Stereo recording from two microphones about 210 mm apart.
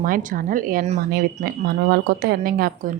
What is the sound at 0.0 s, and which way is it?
A woman's voice, 40° right (ahead or behind).